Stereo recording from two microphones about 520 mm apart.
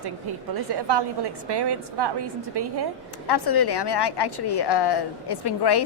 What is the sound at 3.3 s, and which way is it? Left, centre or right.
A woman's voice, left.